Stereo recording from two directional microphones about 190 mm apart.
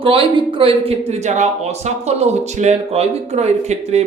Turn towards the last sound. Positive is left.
turn(degrees=-35)  # may be behind; listen again after turning